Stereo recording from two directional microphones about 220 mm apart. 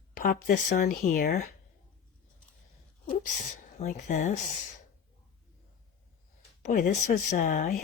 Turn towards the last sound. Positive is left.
turn(degrees=40)  # may be behind; listen again after turning